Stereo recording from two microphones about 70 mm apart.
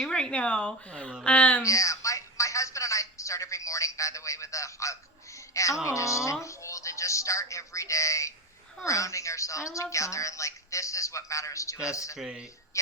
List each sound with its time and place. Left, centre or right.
0.0 s speech: centre
1.6 s speech: left
12.1 s speech: centre
12.7 s speech: left